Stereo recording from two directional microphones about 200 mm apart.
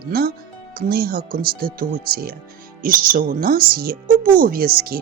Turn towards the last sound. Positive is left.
turn(degrees=-45)  # may be behind; listen again after turning